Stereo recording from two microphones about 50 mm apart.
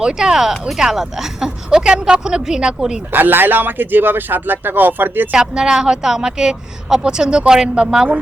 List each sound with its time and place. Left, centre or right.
0.0 s speech: centre
3.1 s speech: right
5.3 s speech: centre